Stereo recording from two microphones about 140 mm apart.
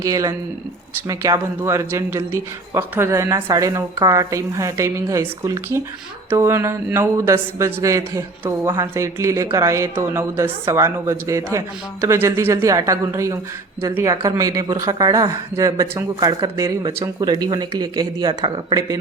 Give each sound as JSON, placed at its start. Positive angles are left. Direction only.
{"t": 0.0, "sound": "a man's voice", "side_deg": -25}